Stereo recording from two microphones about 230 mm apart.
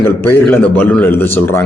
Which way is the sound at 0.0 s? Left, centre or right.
Centre.